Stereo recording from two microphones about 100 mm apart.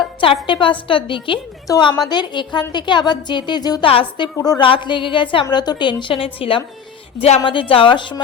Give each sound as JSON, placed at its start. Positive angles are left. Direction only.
{"t": 0.4, "sound": "a woman's voice", "side_deg": 55}
{"t": 3.8, "sound": "a woman's voice", "side_deg": 70}
{"t": 4.4, "sound": "a woman's voice", "side_deg": 40}
{"t": 4.6, "sound": "a woman's voice", "side_deg": 55}
{"t": 7.2, "sound": "speech", "side_deg": 90}
{"t": 7.4, "sound": "a woman's voice", "side_deg": 60}